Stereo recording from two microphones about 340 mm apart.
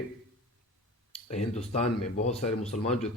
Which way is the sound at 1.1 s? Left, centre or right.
Centre.